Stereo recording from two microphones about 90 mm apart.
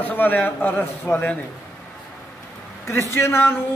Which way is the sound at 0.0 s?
20° left (ahead or behind).